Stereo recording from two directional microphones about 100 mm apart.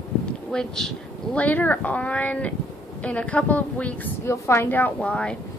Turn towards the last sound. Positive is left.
turn(degrees=10)  # may be behind; listen again after turning